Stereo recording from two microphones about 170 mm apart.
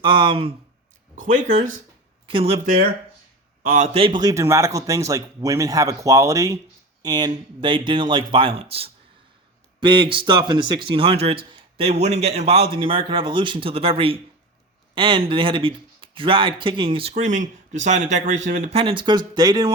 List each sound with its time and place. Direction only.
0.0 s speech: 30° right (ahead or behind)
1.1 s speech: 50° right (ahead or behind)
2.2 s speech: 35° right (ahead or behind)
3.6 s a man's voice: 55° right (ahead or behind)
3.9 s speech: 30° right (ahead or behind)